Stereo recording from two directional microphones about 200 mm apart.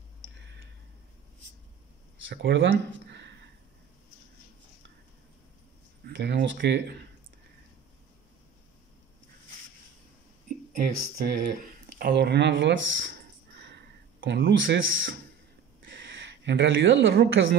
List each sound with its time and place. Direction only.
2.2 s speech: 65° right (ahead or behind)
6.0 s speech: 60° right (ahead or behind)
10.7 s speech: 45° right (ahead or behind)
12.0 s speech: 55° right (ahead or behind)
14.2 s speech: 65° right (ahead or behind)
15.9 s a sound: 65° right (ahead or behind)